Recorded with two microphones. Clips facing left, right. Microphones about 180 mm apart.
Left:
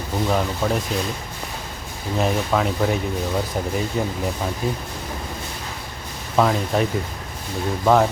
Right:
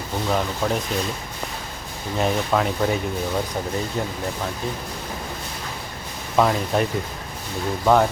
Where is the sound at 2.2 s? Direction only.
Centre (ahead or behind).